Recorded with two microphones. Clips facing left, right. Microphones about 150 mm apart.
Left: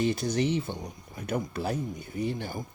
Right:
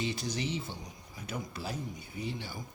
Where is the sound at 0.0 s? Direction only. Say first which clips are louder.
Left 8 dB; 55° left (ahead or behind).